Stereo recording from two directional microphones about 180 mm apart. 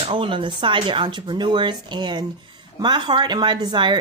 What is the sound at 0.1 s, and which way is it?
Speech, 30° right (ahead or behind).